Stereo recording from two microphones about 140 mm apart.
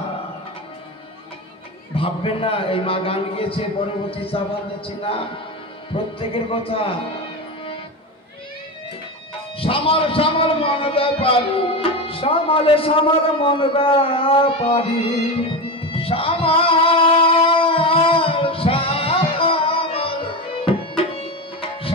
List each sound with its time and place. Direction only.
2.0 s a man's voice: 40° left (ahead or behind)
9.6 s a man's voice: 40° left (ahead or behind)
15.9 s music: 40° left (ahead or behind)
20.6 s tabla: 40° left (ahead or behind)